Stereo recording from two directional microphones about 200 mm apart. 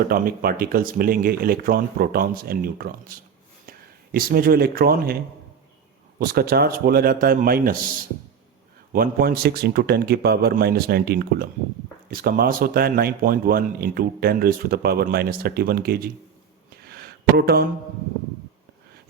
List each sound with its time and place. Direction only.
0.1 s speech: 45° right (ahead or behind)
6.1 s speech: 50° right (ahead or behind)
16.6 s a sound: 50° right (ahead or behind)